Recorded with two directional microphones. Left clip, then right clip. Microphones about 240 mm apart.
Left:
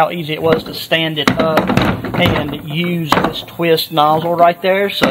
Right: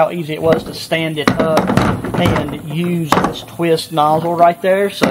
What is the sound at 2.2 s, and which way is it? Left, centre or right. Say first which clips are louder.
Speech: left 2 dB; centre.